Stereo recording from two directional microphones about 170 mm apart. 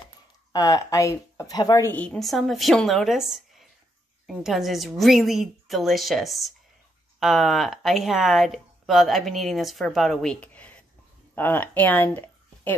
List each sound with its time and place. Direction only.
0.5 s a woman's voice: 20° left (ahead or behind)
1.9 s speech: 5° left (ahead or behind)